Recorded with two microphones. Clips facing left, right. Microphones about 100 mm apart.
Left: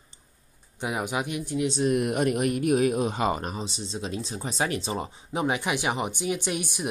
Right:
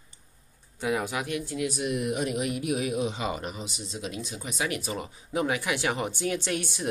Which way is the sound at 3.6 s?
30° left (ahead or behind).